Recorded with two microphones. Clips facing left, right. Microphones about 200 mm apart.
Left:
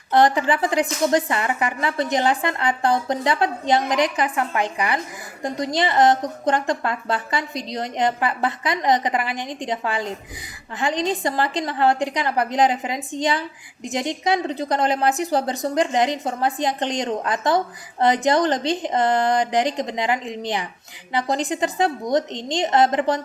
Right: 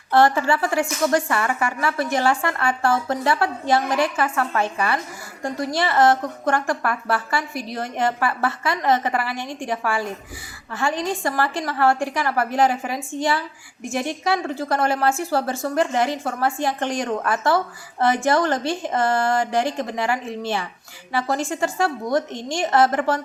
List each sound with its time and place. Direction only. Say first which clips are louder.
0.1 s a woman's voice: even; 20° left (ahead or behind)